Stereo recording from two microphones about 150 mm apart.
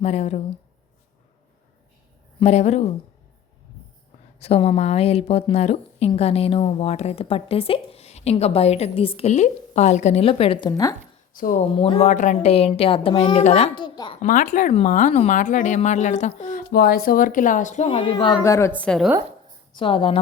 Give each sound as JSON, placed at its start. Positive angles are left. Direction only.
{"t": 0.0, "sound": "a woman's voice", "side_deg": 45}
{"t": 2.4, "sound": "a woman's voice", "side_deg": 45}
{"t": 4.4, "sound": "a woman's voice", "side_deg": 45}
{"t": 11.3, "sound": "a woman's voice", "side_deg": 65}
{"t": 11.6, "sound": "speech", "side_deg": 35}
{"t": 12.0, "sound": "a woman's voice", "side_deg": 55}
{"t": 13.7, "sound": "speech", "side_deg": 30}
{"t": 14.2, "sound": "a woman's voice", "side_deg": 60}
{"t": 17.8, "sound": "speech", "side_deg": 35}
{"t": 18.8, "sound": "a woman's voice", "side_deg": 5}
{"t": 19.7, "sound": "speech", "side_deg": 35}